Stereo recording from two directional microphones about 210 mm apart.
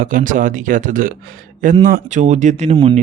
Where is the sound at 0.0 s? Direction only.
40° right (ahead or behind).